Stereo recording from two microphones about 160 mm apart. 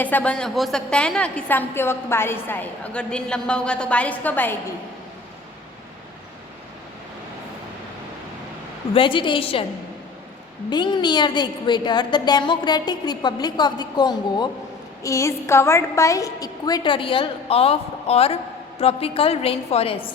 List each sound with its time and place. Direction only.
0.0 s a woman's voice: 10° left (ahead or behind)
8.9 s a woman's voice: 30° left (ahead or behind)
10.7 s a woman's voice: 30° left (ahead or behind)